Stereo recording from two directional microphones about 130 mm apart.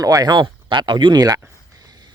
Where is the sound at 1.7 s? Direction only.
30° right (ahead or behind).